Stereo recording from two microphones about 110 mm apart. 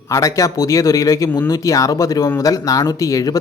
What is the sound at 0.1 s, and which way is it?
Speech, 30° left (ahead or behind).